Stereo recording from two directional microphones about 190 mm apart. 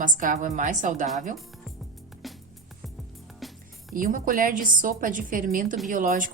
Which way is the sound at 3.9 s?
45° right (ahead or behind).